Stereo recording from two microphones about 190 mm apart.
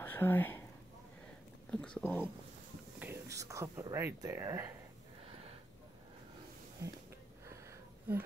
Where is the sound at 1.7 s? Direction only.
5° left (ahead or behind).